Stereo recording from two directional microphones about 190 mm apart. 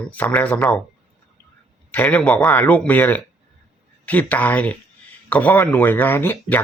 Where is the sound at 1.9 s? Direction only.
5° left (ahead or behind).